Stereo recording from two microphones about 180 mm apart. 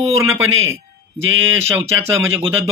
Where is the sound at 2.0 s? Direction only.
15° right (ahead or behind).